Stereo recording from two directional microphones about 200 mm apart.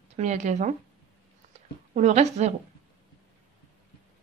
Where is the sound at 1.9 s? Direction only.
35° right (ahead or behind).